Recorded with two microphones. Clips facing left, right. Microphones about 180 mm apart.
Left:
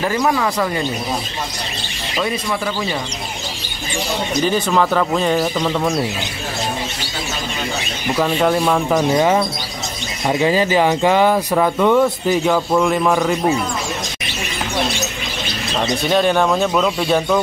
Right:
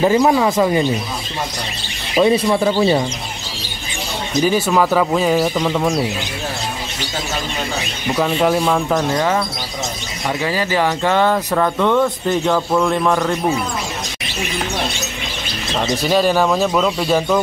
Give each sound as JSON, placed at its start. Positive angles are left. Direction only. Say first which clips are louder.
{"t": 0.0, "sound": "speech", "louder": "right 5 dB", "side_deg": -20}
{"t": 2.1, "sound": "speech", "louder": "right 8 dB", "side_deg": -25}
{"t": 4.5, "sound": "speech", "louder": "right 2 dB", "side_deg": -5}
{"t": 8.2, "sound": "speech", "louder": "even", "side_deg": 0}
{"t": 9.1, "sound": "speech", "louder": "left 3 dB", "side_deg": 20}
{"t": 15.8, "sound": "speech", "louder": "even", "side_deg": -5}